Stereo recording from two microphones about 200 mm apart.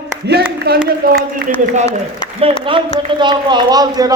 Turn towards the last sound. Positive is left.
turn(degrees=-20)  # may be behind; listen again after turning